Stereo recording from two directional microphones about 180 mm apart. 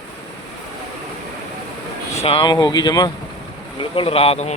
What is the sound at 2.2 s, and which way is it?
Speech, 30° left (ahead or behind).